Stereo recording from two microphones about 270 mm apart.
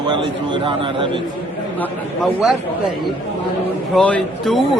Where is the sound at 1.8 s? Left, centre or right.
Centre.